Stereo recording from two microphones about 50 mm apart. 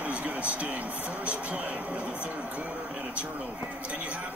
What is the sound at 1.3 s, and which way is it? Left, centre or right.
Speech, right.